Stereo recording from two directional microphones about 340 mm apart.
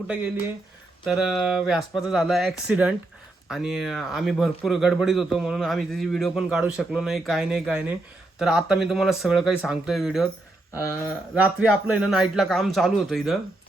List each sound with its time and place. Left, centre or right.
0.1 s speech: centre
11.6 s speech: centre